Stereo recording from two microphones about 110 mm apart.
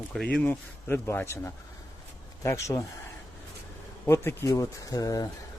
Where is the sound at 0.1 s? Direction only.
5° left (ahead or behind).